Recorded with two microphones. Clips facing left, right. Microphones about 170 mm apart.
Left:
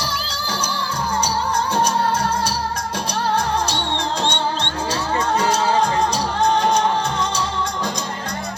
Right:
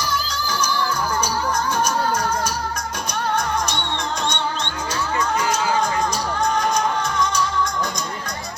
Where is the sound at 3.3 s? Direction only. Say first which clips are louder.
Left 2 dB; 30° left (ahead or behind).